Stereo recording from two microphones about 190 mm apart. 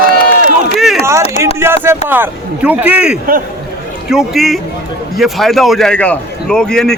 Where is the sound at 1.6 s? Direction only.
10° right (ahead or behind); by 7.0 s 5° left (ahead or behind).